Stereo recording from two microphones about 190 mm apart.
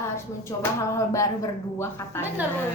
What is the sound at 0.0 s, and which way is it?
Speech, 15° left (ahead or behind).